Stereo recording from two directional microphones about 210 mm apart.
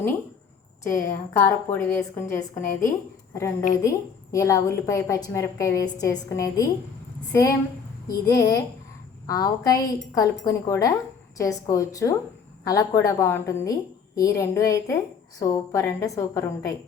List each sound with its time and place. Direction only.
0.9 s a woman's voice: 15° left (ahead or behind)
8.0 s a woman's voice: 15° left (ahead or behind)